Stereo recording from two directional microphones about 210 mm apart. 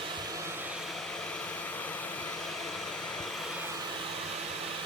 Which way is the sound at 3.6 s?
15° right (ahead or behind).